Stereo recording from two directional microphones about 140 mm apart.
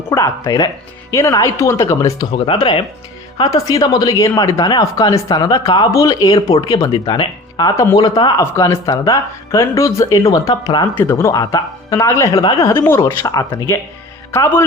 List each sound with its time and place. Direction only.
0.1 s speech: 25° left (ahead or behind)
2.3 s speech: 35° left (ahead or behind)
10.9 s speech: 15° left (ahead or behind)